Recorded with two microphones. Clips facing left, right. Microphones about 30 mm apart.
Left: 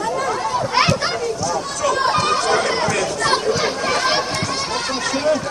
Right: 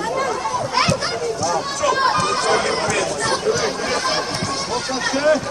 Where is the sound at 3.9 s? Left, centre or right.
Left.